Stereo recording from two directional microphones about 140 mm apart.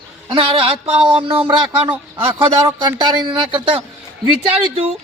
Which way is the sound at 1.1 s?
35° right (ahead or behind).